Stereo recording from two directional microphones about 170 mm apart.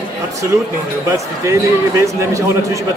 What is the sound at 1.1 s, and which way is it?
A man's voice, 15° right (ahead or behind).